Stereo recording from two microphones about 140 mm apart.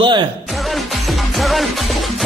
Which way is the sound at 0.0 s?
35° right (ahead or behind).